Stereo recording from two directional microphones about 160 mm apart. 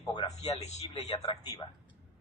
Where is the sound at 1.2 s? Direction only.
30° left (ahead or behind).